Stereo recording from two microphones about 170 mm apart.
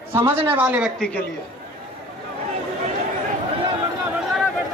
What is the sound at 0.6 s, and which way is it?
Speech, 10° right (ahead or behind).